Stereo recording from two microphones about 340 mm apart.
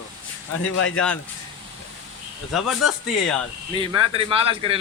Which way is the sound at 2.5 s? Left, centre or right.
Centre.